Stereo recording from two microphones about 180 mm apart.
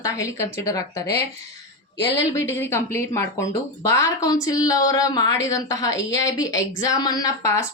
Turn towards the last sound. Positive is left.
turn(degrees=20)  # may be behind; listen again after turning